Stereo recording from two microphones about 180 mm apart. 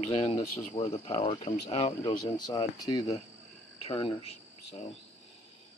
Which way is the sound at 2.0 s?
25° left (ahead or behind).